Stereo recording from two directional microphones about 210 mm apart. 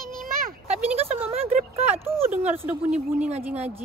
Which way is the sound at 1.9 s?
10° right (ahead or behind).